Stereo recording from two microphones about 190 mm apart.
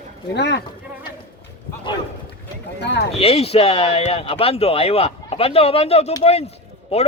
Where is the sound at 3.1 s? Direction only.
30° left (ahead or behind).